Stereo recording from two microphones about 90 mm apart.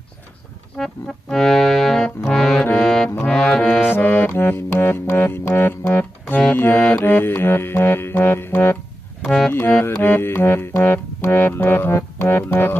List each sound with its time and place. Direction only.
0.7 s music: 5° left (ahead or behind)
2.2 s brass instrument: 5° left (ahead or behind)
3.9 s music: 20° left (ahead or behind)
9.8 s music: 20° left (ahead or behind)